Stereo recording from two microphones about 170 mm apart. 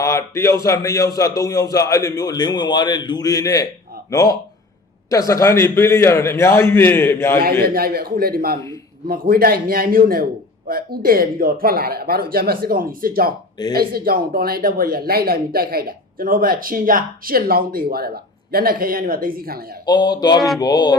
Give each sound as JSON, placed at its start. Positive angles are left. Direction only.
{"t": 0.0, "sound": "a man's voice", "side_deg": 15}
{"t": 7.6, "sound": "speech", "side_deg": -60}
{"t": 19.8, "sound": "a man's voice", "side_deg": 25}